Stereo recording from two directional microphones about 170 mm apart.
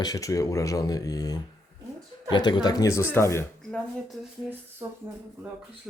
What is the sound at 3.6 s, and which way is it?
Speech, centre (ahead or behind).